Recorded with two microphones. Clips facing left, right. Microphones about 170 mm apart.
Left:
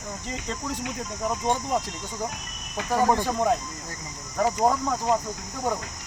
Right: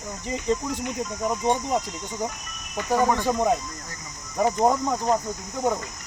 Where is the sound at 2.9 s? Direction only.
15° left (ahead or behind).